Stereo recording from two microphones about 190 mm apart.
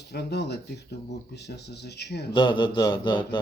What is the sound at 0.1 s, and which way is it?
Speech, 60° left (ahead or behind).